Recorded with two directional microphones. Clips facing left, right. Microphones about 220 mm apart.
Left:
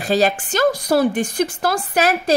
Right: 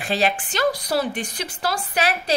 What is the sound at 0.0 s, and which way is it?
A woman's voice, 40° left (ahead or behind).